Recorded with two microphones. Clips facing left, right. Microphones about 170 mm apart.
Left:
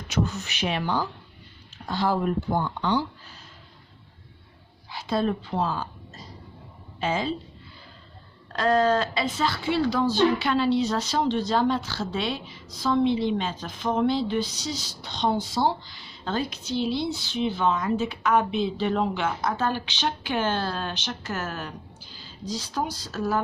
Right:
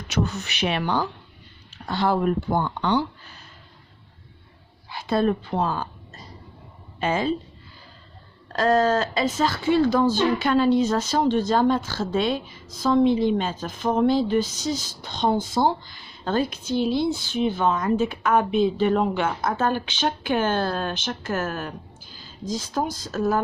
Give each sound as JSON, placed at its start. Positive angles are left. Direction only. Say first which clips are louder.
{"t": 0.1, "sound": "speech", "louder": "right 1 dB", "side_deg": -70}
{"t": 4.9, "sound": "speech", "louder": "right 4 dB", "side_deg": -55}
{"t": 8.5, "sound": "speech", "louder": "right 2 dB", "side_deg": -45}